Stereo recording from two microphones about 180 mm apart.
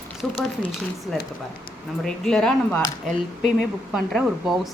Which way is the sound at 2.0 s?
5° left (ahead or behind).